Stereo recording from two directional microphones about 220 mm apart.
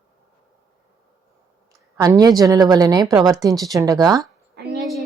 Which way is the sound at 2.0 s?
15° right (ahead or behind).